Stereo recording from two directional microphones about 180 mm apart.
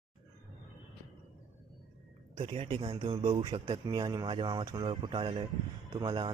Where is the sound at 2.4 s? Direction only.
30° right (ahead or behind).